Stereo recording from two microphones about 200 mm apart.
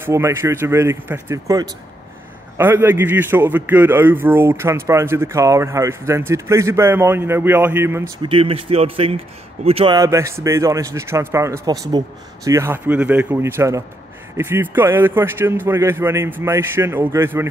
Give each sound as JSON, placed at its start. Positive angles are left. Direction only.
{"t": 0.0, "sound": "a man's voice", "side_deg": -15}
{"t": 8.3, "sound": "speech", "side_deg": -30}
{"t": 9.9, "sound": "a man's voice", "side_deg": -15}